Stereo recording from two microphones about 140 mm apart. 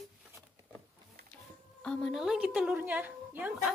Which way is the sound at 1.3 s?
5° left (ahead or behind).